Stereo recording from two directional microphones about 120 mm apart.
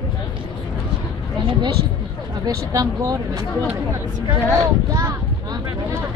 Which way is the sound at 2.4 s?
30° right (ahead or behind).